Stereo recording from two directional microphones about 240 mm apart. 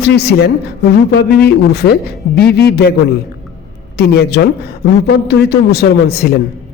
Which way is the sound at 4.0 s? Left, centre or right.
Left.